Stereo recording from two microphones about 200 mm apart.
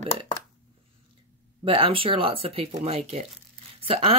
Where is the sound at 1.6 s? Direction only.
25° right (ahead or behind).